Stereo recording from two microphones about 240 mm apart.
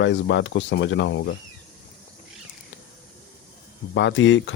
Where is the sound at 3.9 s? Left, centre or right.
Left.